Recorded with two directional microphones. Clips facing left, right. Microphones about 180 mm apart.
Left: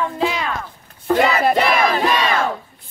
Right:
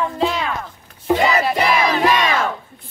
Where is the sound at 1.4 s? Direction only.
55° left (ahead or behind).